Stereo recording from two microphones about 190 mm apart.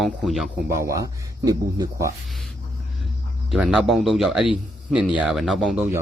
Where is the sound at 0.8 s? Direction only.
15° right (ahead or behind).